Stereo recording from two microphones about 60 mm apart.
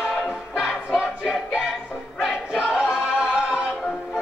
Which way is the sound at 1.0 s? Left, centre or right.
Centre.